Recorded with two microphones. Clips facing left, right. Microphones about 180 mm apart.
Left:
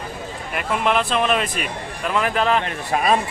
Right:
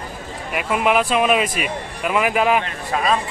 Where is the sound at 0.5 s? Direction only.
5° right (ahead or behind).